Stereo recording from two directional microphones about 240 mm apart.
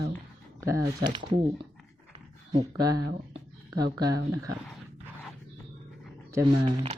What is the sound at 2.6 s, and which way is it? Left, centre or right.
Speech, centre.